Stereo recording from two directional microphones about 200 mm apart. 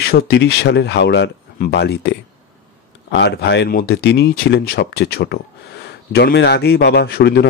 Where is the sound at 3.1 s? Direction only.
55° left (ahead or behind).